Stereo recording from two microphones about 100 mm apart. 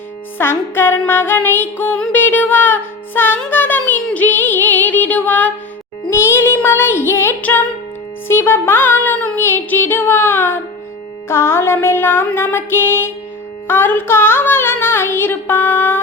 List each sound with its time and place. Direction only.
0.3 s music: 25° left (ahead or behind)
2.1 s child singing: 20° left (ahead or behind)
4.0 s music: 15° left (ahead or behind)